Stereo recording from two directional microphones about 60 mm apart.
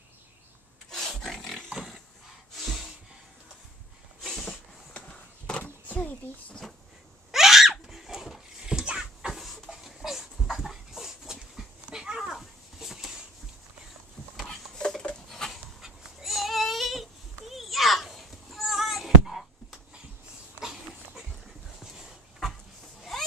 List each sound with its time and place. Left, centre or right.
0.8 s roaring cats: centre
1.7 s pig: centre
2.5 s snort: centre
4.2 s a sound: centre
4.9 s skateboard: centre
5.6 s a sound: left
7.2 s screaming: centre
9.8 s dog: centre
12.4 s bird flight: centre
14.5 s a sound: centre
15.2 s dog: centre
15.5 s goat: centre
21.8 s dog: centre